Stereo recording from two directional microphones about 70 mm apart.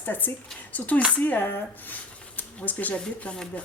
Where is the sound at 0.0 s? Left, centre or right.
Left.